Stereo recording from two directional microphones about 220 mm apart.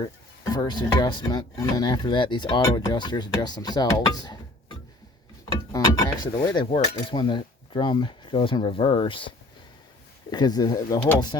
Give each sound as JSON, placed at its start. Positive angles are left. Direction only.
{"t": 0.5, "sound": "speech", "side_deg": 20}